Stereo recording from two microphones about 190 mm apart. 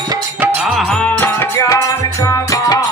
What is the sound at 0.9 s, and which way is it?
Music, 5° left (ahead or behind).